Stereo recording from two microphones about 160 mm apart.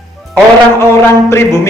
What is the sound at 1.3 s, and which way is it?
Speech, 15° left (ahead or behind).